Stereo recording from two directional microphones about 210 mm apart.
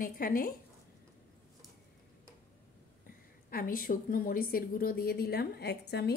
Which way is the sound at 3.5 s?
45° left (ahead or behind).